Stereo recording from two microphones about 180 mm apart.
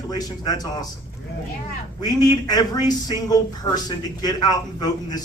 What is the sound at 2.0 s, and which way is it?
Speech, 20° left (ahead or behind).